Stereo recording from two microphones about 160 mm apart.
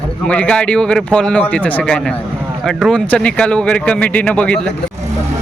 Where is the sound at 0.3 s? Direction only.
5° left (ahead or behind).